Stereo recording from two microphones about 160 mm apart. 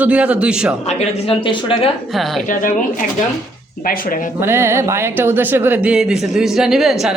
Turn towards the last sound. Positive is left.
turn(degrees=0)  # may be behind; listen again after turning